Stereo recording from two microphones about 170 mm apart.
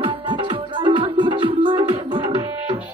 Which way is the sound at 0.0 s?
30° right (ahead or behind).